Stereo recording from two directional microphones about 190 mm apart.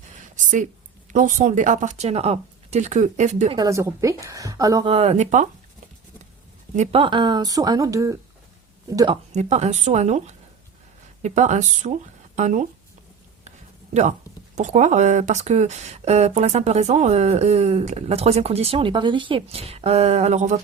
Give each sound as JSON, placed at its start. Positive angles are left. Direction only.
{"t": 0.3, "sound": "a sound", "side_deg": -40}
{"t": 1.1, "sound": "speech", "side_deg": -40}
{"t": 3.6, "sound": "a woman's voice", "side_deg": -15}
{"t": 4.9, "sound": "speech", "side_deg": -35}
{"t": 6.7, "sound": "speech", "side_deg": -30}
{"t": 9.3, "sound": "speech", "side_deg": -35}
{"t": 13.9, "sound": "speech", "side_deg": -40}